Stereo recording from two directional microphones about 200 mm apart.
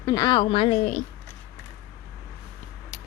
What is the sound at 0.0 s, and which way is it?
Speech, 20° left (ahead or behind).